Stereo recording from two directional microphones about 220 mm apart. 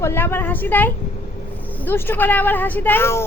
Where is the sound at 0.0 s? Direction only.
10° left (ahead or behind).